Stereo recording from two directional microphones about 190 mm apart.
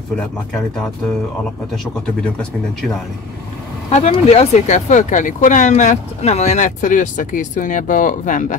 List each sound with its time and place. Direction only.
3.9 s speech: 35° left (ahead or behind)